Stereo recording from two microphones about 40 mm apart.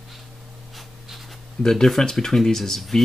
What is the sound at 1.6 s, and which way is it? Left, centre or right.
Speech, centre.